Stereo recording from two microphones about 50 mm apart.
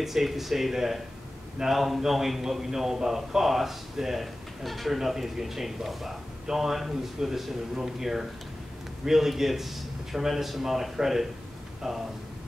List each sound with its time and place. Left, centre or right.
0.0 s a man's voice: centre